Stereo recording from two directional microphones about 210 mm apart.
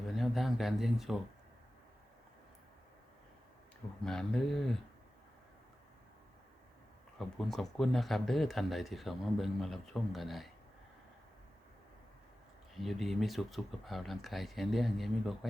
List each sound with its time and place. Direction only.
0.1 s a sound: centre (ahead or behind)
4.0 s speech: 5° left (ahead or behind)
7.2 s speech: centre (ahead or behind)
12.7 s speech: centre (ahead or behind)